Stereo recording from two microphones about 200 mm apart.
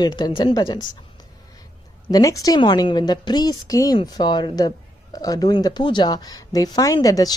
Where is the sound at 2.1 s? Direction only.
15° left (ahead or behind).